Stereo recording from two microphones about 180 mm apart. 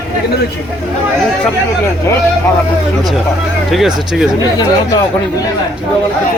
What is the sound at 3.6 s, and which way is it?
Speech, centre (ahead or behind).